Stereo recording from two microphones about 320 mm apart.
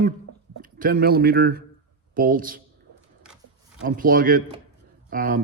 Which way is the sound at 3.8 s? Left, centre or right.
Right.